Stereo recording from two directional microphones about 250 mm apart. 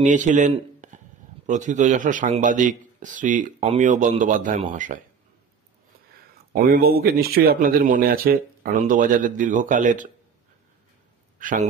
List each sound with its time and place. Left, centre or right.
0.0 s speech: right
6.3 s speech: right
11.3 s speech: right